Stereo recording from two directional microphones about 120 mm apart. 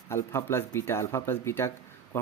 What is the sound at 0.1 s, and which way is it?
Speech, 20° left (ahead or behind).